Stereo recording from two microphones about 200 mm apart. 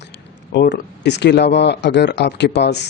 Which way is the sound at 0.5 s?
60° left (ahead or behind).